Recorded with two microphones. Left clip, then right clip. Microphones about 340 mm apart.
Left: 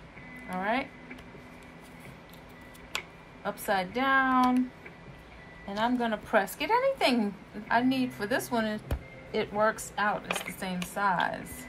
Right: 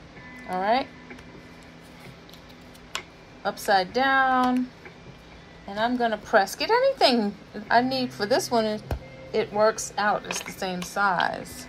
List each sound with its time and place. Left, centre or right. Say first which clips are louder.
0.5 s a woman's voice: right 7 dB; centre
3.4 s a woman's voice: right 7 dB; centre
5.7 s a woman's voice: right 4 dB; centre